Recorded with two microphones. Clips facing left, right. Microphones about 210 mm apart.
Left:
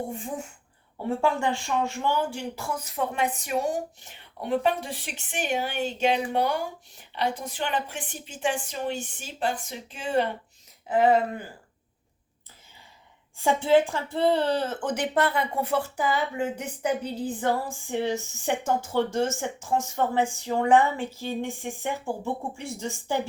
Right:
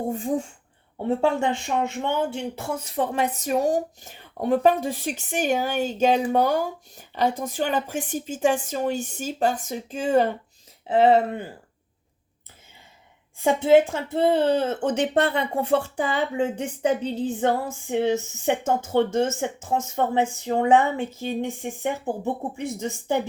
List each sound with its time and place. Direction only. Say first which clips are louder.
0.3 s speech: right 9 dB; 30° right (ahead or behind)
10.8 s speech: right 3 dB; 30° right (ahead or behind)
13.4 s speech: right 4 dB; 20° right (ahead or behind)